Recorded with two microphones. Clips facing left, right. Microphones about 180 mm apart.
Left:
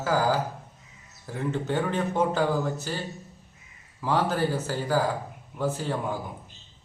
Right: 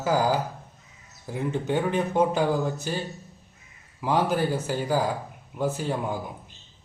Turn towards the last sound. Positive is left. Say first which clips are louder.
# right 1 dB
turn(degrees=-15)  # may be behind; listen again after turning